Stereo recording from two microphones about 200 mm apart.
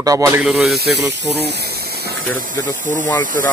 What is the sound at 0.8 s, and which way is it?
Speech, 55° right (ahead or behind).